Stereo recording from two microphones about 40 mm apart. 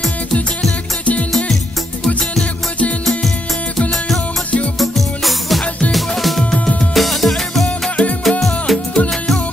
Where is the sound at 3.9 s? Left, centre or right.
Centre.